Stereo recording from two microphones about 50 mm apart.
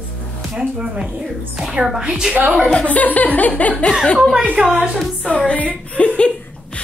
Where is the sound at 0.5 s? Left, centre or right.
Right.